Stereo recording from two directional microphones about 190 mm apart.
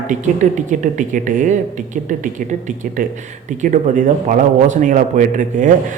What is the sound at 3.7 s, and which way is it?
A man's voice, 40° right (ahead or behind).